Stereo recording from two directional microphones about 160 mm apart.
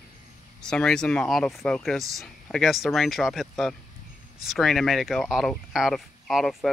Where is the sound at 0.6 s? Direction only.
5° left (ahead or behind).